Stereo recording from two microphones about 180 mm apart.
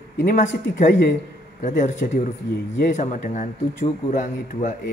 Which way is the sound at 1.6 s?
45° left (ahead or behind).